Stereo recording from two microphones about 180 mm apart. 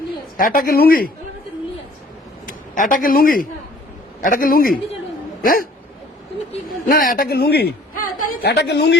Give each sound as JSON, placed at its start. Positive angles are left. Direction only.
{"t": 0.3, "sound": "speech", "side_deg": 50}
{"t": 2.5, "sound": "a man's voice", "side_deg": 50}
{"t": 6.8, "sound": "a man's voice", "side_deg": 50}